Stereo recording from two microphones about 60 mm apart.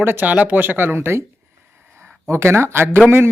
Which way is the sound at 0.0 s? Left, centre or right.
Right.